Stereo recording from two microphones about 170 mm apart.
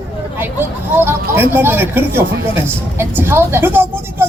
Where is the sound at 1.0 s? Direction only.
15° right (ahead or behind).